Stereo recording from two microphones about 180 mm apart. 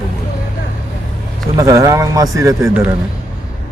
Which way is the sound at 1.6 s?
15° right (ahead or behind).